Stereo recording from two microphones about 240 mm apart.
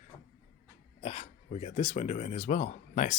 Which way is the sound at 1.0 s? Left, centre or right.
Left.